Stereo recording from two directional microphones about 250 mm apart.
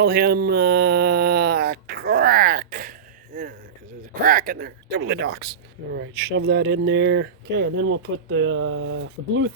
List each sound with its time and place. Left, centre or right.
0.0 s speech: right
4.1 s speech: right